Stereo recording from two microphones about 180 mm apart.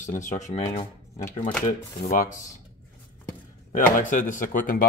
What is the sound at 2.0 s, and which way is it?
Speech, 50° left (ahead or behind).